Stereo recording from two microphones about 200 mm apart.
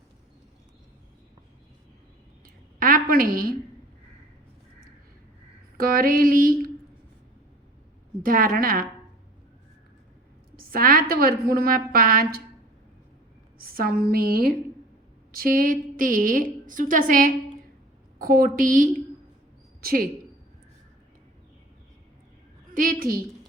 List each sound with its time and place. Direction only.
2.7 s a sound: 45° right (ahead or behind)
5.7 s a woman's voice: 45° right (ahead or behind)
8.2 s a woman's voice: 45° right (ahead or behind)
10.6 s a sound: 45° right (ahead or behind)
11.1 s a woman's voice: 45° right (ahead or behind)
13.6 s a woman's voice: 45° right (ahead or behind)
22.7 s a woman's voice: 45° right (ahead or behind)